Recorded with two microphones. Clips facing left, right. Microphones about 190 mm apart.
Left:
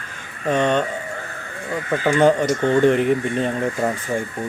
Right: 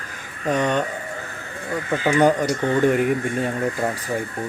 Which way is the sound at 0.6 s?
20° left (ahead or behind).